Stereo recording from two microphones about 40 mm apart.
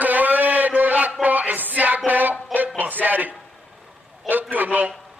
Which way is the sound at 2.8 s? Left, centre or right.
Right.